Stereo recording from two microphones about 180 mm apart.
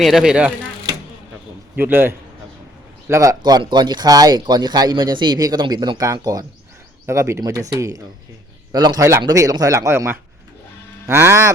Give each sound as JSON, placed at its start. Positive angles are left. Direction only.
{"t": 0.0, "sound": "speech", "side_deg": 0}
{"t": 1.8, "sound": "speech", "side_deg": -10}